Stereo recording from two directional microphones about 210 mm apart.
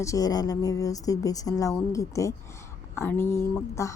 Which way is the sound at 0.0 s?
15° left (ahead or behind).